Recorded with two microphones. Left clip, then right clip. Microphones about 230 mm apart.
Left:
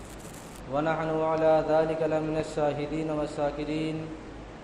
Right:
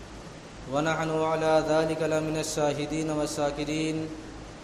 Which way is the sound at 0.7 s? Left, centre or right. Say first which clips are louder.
Even; right.